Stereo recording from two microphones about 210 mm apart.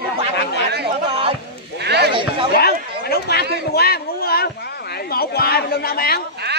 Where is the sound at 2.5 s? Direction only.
45° left (ahead or behind).